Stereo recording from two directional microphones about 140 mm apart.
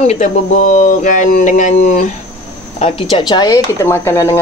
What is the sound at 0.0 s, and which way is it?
Speech, 55° left (ahead or behind).